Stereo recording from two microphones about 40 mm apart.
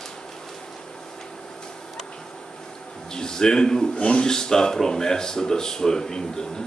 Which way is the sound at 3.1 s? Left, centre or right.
Centre.